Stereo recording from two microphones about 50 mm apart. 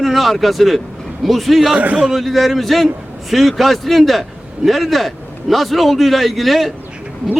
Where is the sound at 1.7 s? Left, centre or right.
Right.